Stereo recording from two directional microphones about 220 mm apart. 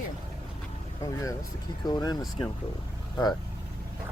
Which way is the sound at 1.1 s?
15° left (ahead or behind).